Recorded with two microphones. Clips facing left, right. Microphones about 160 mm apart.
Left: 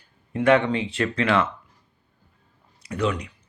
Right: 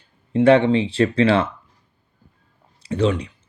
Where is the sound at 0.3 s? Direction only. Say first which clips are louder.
Right 5 dB; 30° right (ahead or behind).